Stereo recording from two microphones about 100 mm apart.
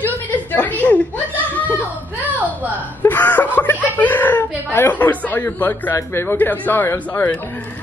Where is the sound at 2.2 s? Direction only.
15° right (ahead or behind).